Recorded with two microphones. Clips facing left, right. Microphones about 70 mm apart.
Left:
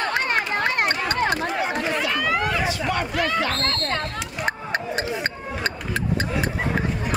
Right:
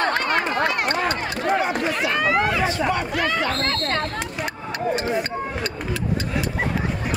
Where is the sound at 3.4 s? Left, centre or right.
Centre.